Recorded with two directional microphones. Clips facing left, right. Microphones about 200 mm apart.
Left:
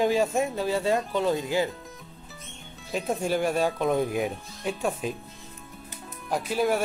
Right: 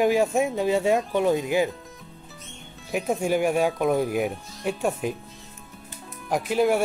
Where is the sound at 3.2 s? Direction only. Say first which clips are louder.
Right 3 dB; 15° right (ahead or behind).